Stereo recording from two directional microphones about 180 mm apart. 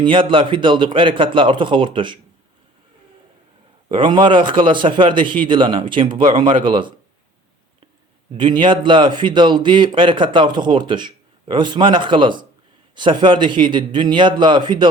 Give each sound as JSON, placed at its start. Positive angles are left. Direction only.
{"t": 0.0, "sound": "a man's voice", "side_deg": -30}
{"t": 3.8, "sound": "a man's voice", "side_deg": -25}
{"t": 8.3, "sound": "a man's voice", "side_deg": -25}